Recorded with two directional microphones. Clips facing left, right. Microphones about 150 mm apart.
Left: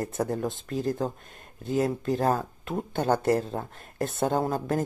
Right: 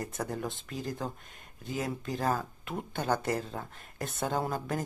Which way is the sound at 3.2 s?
50° left (ahead or behind).